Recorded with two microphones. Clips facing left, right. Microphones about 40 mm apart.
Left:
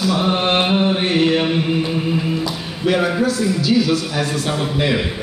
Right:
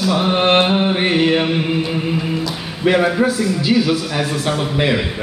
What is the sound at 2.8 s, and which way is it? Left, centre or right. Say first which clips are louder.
Speech: right 3 dB; right.